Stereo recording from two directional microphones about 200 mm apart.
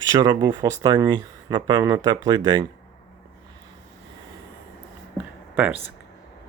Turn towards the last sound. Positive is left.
turn(degrees=-10)  # may be behind; listen again after turning